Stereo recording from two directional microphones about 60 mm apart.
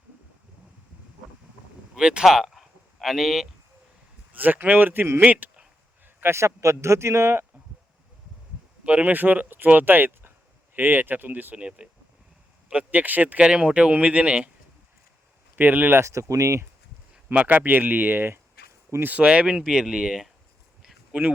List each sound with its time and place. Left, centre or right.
2.0 s speech: centre
4.3 s speech: right
6.1 s a man's voice: right
8.8 s speech: right
11.5 s speech: centre
15.5 s speech: right
16.0 s speech: right
17.3 s speech: right
19.2 s speech: centre